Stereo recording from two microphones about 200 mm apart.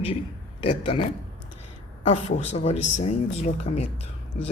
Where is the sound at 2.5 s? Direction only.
35° left (ahead or behind).